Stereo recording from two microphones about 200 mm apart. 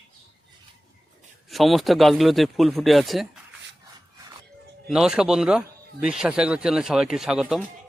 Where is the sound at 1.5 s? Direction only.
Centre (ahead or behind).